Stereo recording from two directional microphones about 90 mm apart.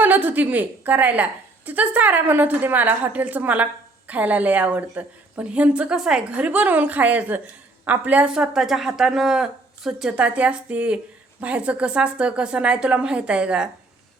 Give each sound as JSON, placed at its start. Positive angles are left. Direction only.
{"t": 0.0, "sound": "a woman's voice", "side_deg": -20}
{"t": 8.3, "sound": "a woman's voice", "side_deg": -5}